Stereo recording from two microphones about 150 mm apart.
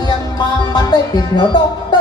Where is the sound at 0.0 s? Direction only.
30° left (ahead or behind).